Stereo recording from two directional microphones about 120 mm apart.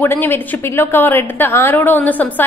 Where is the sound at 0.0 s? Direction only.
20° left (ahead or behind).